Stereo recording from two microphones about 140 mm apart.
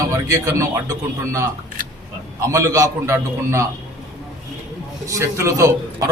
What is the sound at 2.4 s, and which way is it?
A man's voice, 20° right (ahead or behind).